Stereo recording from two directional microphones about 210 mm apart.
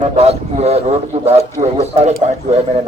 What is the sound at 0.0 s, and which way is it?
A man's voice, 30° right (ahead or behind).